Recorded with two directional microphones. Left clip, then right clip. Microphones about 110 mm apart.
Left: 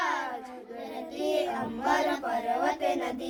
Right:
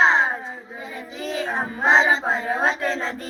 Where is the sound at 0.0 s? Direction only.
5° left (ahead or behind).